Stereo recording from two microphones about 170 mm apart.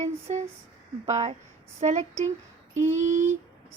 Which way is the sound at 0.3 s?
40° right (ahead or behind).